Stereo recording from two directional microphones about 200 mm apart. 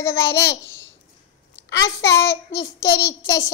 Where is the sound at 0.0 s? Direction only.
15° left (ahead or behind).